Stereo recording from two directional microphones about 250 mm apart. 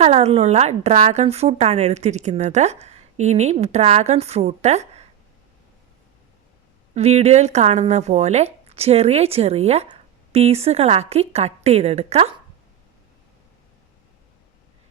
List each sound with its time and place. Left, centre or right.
0.0 s a woman's voice: right
6.9 s a woman's voice: right